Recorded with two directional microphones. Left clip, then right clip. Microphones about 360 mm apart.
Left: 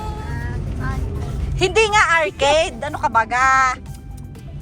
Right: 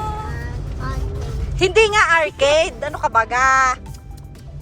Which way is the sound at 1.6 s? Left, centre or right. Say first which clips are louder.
Right 1 dB; centre.